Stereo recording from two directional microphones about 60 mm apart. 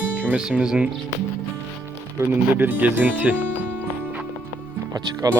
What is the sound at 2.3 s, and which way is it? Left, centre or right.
Speech, right.